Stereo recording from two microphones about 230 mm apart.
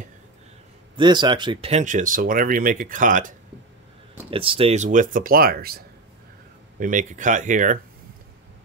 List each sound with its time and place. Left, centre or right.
0.9 s speech: centre; by 3.3 s right
4.3 s speech: right